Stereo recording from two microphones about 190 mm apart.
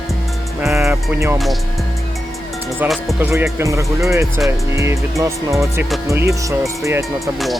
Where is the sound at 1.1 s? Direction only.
15° right (ahead or behind).